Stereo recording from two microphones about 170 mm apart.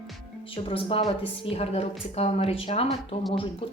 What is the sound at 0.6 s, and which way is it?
A woman's voice, 30° left (ahead or behind).